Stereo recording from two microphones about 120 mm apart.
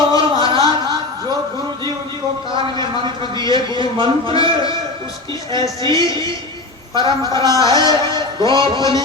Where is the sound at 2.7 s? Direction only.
40° right (ahead or behind).